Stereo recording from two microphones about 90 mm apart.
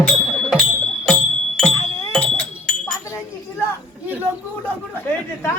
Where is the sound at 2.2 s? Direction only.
15° left (ahead or behind).